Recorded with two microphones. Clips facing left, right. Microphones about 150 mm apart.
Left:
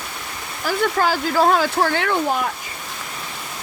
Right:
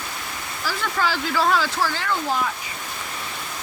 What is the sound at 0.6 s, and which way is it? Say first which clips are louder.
Speech: left 6 dB; 50° left (ahead or behind).